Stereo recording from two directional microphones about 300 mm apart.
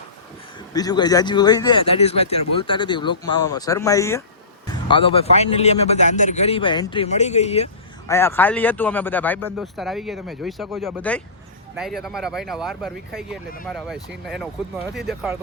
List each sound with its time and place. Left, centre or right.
0.7 s a man's voice: centre
8.1 s speech: centre